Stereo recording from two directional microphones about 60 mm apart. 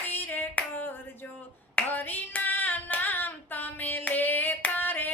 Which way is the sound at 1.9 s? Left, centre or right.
Left.